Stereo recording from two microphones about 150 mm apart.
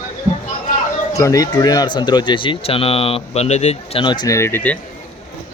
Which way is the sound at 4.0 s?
30° left (ahead or behind).